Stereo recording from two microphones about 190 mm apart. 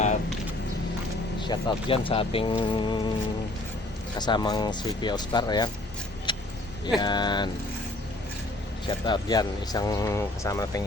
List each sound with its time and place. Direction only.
1.4 s speech: 25° left (ahead or behind)
4.2 s speech: 20° left (ahead or behind)
6.3 s vehicle: 25° left (ahead or behind)
7.0 s speech: 25° left (ahead or behind)
8.9 s speech: 25° left (ahead or behind)